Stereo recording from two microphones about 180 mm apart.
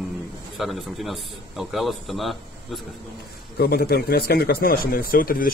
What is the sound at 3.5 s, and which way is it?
Speech, 60° left (ahead or behind).